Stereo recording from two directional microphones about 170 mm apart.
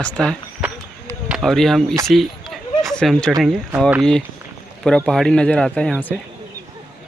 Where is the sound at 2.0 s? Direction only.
Centre (ahead or behind).